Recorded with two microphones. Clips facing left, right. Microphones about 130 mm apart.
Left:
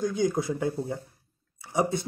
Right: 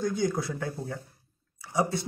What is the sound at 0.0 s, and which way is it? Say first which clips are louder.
Speech: left 2 dB; 15° left (ahead or behind).